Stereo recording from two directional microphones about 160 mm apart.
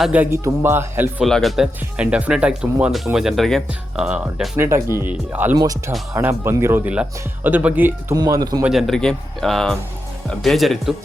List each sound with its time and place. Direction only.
0.0 s speech: 10° right (ahead or behind)
1.2 s speech: centre (ahead or behind)
8.1 s a man's voice: 25° right (ahead or behind)
8.6 s speech: centre (ahead or behind)